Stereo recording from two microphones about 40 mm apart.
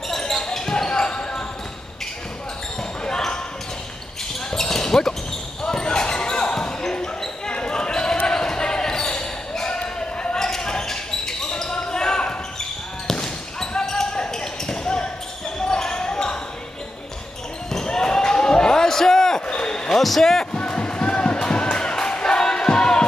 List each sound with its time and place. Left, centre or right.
0.1 s basketball bounce: centre
4.5 s basketball bounce: centre
6.8 s basketball bounce: centre
17.6 s basketball bounce: centre
19.4 s basketball bounce: left
20.0 s basketball bounce: centre
20.5 s music: left
22.1 s battle cry: centre